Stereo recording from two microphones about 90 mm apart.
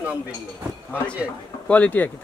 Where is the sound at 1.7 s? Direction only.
15° left (ahead or behind).